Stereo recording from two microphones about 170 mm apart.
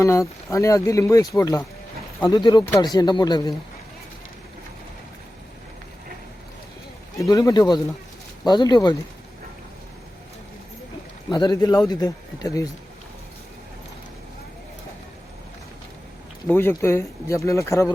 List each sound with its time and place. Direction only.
0.0 s a man's voice: 15° left (ahead or behind)
7.3 s a man's voice: 20° left (ahead or behind)
11.3 s a man's voice: 25° left (ahead or behind)
16.5 s speech: 15° left (ahead or behind)